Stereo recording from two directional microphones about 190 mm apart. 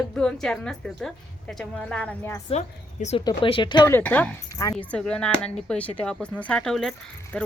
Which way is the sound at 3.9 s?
10° left (ahead or behind).